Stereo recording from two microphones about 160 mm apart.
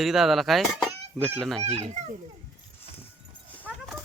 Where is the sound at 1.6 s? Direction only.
40° right (ahead or behind).